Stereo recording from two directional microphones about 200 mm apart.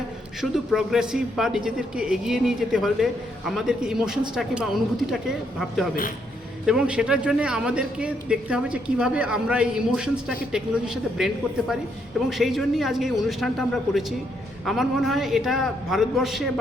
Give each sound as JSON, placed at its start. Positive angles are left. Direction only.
{"t": 0.5, "sound": "a man's voice", "side_deg": 0}
{"t": 12.3, "sound": "a man's voice", "side_deg": 0}